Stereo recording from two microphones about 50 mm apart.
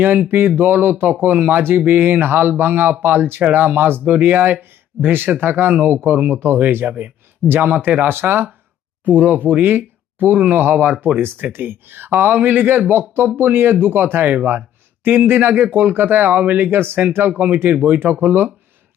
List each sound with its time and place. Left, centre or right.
0.0 s speech: right
4.0 s speech: right
6.4 s speech: right
6.8 s speech: right
7.4 s speech: right
11.2 s speech: right